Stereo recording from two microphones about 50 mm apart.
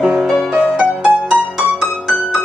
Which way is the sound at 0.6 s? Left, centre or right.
Right.